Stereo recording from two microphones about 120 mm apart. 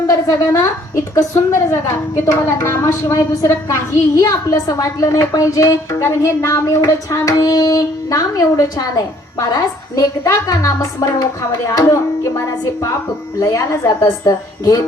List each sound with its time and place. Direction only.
0.1 s a woman's voice: 25° left (ahead or behind)
13.4 s a woman's voice: 25° left (ahead or behind)